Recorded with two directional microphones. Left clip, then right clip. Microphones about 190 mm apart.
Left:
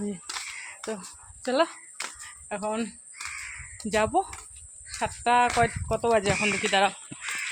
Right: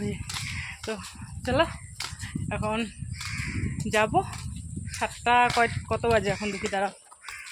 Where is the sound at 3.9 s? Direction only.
5° right (ahead or behind).